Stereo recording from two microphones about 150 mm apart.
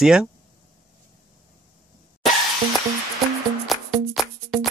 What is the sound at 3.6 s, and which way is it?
Music, centre (ahead or behind).